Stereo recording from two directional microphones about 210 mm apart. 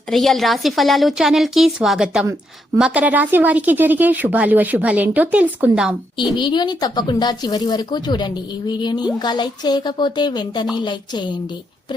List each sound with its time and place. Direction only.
0.1 s a woman's voice: centre (ahead or behind)
6.3 s speech: 20° left (ahead or behind)